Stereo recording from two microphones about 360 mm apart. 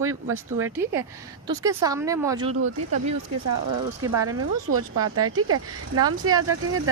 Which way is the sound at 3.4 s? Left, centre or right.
Right.